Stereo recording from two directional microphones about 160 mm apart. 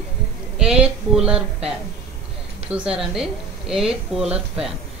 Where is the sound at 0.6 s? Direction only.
5° right (ahead or behind).